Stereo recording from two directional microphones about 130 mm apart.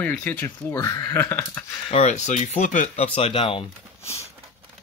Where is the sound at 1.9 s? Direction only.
65° left (ahead or behind).